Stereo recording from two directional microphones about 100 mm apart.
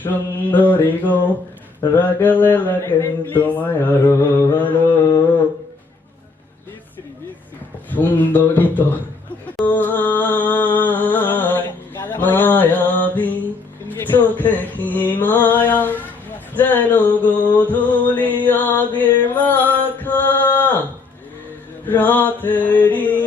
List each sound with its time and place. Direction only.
0.5 s music: 15° left (ahead or behind)
1.9 s a sound: 20° left (ahead or behind)
7.9 s music: 20° left (ahead or behind)
12.0 s mantra: 20° left (ahead or behind)
13.8 s speech: 20° left (ahead or behind)
16.6 s music: 20° left (ahead or behind)
21.8 s mantra: 15° left (ahead or behind)